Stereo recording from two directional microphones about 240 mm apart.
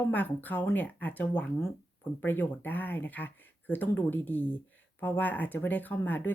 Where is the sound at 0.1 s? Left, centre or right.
Centre.